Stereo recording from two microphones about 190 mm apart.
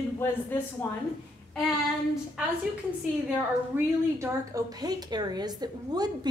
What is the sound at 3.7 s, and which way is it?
A woman's voice, 10° right (ahead or behind).